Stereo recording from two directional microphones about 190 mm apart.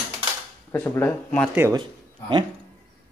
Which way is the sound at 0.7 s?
10° left (ahead or behind).